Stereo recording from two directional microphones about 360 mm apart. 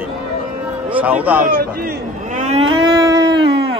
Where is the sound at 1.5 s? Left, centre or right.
Right.